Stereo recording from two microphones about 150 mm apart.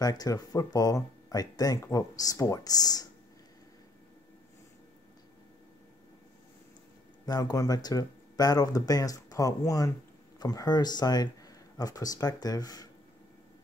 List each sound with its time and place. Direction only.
0.0 s speech: 25° left (ahead or behind)
7.2 s speech: 25° left (ahead or behind)